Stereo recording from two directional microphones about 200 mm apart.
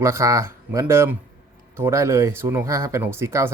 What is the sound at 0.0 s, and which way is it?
Speech, 15° right (ahead or behind).